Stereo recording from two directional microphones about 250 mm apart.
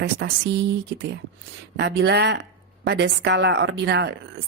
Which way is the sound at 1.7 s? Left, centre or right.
Right.